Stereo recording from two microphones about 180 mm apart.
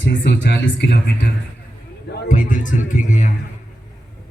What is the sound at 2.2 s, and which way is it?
A man's voice, 45° left (ahead or behind).